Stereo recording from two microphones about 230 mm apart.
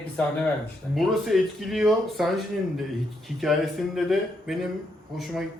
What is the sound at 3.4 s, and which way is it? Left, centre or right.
A man's voice, centre.